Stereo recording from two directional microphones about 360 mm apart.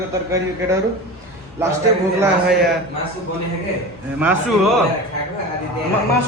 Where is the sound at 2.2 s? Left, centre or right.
Centre.